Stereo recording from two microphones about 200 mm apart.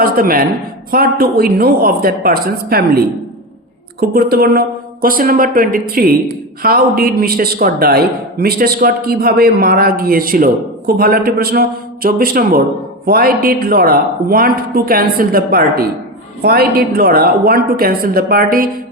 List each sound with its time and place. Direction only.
0.0 s speech: 45° right (ahead or behind)